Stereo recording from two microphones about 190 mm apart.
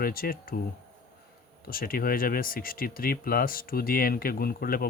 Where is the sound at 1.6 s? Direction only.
50° left (ahead or behind).